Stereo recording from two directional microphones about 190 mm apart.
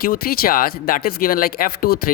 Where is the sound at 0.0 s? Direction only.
50° left (ahead or behind).